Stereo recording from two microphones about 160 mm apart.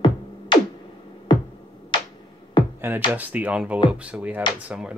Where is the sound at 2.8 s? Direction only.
15° right (ahead or behind).